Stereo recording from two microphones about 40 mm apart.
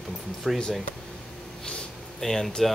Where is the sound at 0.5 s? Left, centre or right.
Centre.